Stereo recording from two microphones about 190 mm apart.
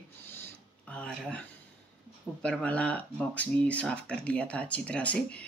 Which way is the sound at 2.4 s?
5° left (ahead or behind).